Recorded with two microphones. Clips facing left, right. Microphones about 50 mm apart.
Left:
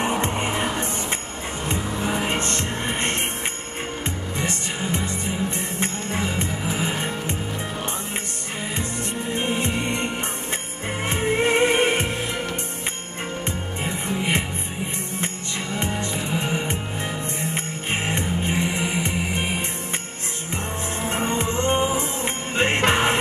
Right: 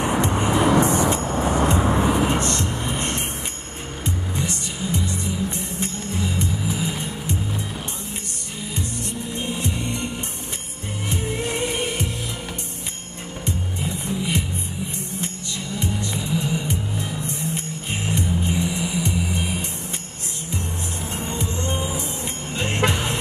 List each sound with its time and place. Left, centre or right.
0.0 s music: left
0.7 s vehicle: right
2.2 s music: left
9.3 s music: left
13.5 s music: left
15.7 s music: left
17.9 s music: left